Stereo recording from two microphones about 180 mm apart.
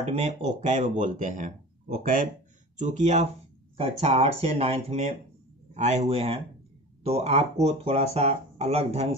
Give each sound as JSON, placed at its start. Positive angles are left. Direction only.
{"t": 0.0, "sound": "speech", "side_deg": -35}
{"t": 2.8, "sound": "speech", "side_deg": -40}